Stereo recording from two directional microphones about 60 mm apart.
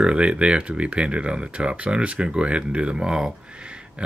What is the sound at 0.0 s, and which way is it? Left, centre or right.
Speech, centre.